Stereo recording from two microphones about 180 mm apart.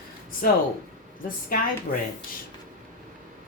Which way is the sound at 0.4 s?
55° left (ahead or behind).